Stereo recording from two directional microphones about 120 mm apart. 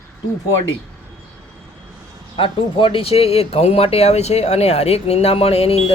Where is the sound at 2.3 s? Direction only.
45° left (ahead or behind).